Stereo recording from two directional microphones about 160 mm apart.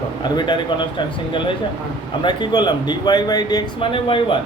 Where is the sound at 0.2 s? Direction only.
30° left (ahead or behind).